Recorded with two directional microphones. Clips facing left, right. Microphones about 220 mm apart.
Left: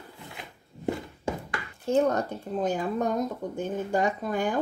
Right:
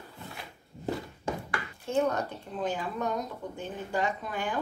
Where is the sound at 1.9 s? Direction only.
45° left (ahead or behind).